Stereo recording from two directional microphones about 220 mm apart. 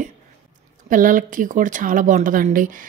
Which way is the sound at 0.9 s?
35° right (ahead or behind).